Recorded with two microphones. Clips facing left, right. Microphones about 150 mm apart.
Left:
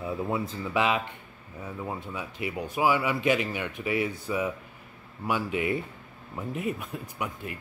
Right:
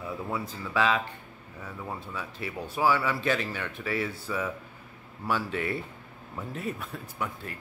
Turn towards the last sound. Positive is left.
turn(degrees=15)  # may be behind; listen again after turning